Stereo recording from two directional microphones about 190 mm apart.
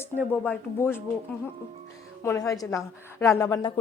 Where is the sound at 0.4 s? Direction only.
10° left (ahead or behind).